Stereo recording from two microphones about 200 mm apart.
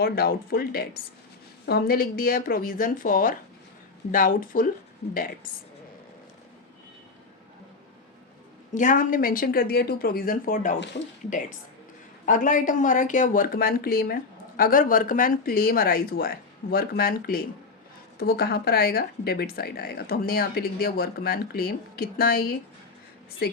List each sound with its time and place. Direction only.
0.0 s speech: 50° left (ahead or behind)
8.7 s speech: 40° left (ahead or behind)
12.2 s speech: 40° left (ahead or behind)